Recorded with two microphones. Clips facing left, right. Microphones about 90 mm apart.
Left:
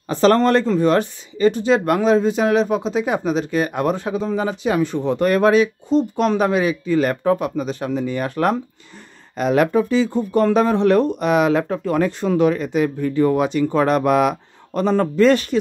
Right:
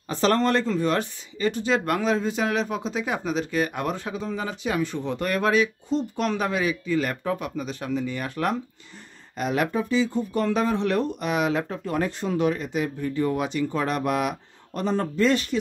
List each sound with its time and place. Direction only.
0.1 s speech: 50° left (ahead or behind)
1.5 s speech: 20° left (ahead or behind); by 8.5 s 45° left (ahead or behind)
9.4 s speech: 70° left (ahead or behind); by 13.7 s 55° left (ahead or behind)
13.7 s speech: 65° left (ahead or behind); by 15.2 s 85° left